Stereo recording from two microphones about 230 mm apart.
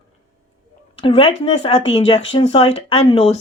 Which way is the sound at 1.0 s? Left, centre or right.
Left.